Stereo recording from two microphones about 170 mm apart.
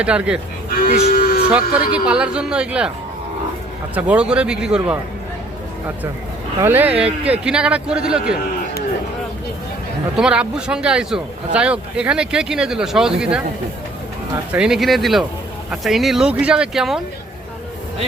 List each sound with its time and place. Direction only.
0.0 s speech: 5° right (ahead or behind)
1.1 s a sound: 65° left (ahead or behind)
1.5 s speech: 5° right (ahead or behind)
3.9 s speech: 10° right (ahead or behind)
6.6 s speech: 10° right (ahead or behind)
10.2 s speech: 5° right (ahead or behind)
14.5 s speech: 5° right (ahead or behind)